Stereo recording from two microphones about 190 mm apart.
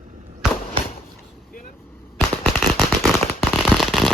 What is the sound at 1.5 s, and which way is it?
Vehicle, 45° left (ahead or behind).